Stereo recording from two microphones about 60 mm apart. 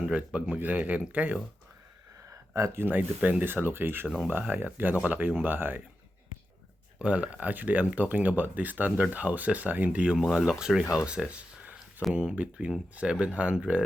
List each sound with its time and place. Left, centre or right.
0.0 s speech: right
2.7 s speech: right
7.0 s speech: right
10.0 s speech: centre
10.9 s a sound: centre
12.1 s speech: right